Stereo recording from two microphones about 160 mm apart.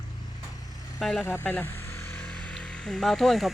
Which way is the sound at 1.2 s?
15° left (ahead or behind).